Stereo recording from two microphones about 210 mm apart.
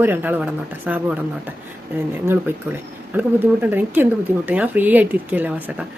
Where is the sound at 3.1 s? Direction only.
10° right (ahead or behind).